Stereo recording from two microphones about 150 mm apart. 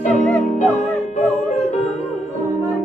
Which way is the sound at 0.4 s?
50° left (ahead or behind).